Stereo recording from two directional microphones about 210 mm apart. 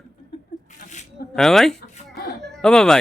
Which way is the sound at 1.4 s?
Centre (ahead or behind).